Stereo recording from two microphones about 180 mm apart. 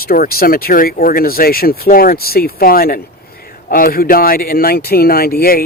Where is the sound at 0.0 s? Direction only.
55° left (ahead or behind).